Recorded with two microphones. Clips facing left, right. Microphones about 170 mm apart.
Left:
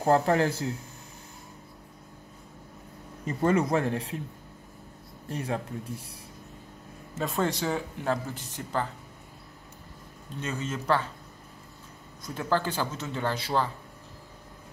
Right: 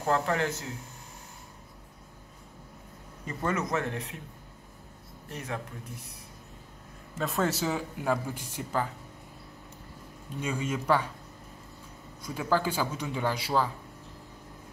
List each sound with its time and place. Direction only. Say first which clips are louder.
0.0 s speech: left 5 dB; 35° left (ahead or behind)
3.4 s speech: left 6 dB; 30° left (ahead or behind)
5.3 s speech: left 5 dB; 30° left (ahead or behind)
7.2 s speech: even; centre (ahead or behind)
10.4 s speech: right 1 dB; 10° right (ahead or behind)
12.2 s speech: even; 10° right (ahead or behind)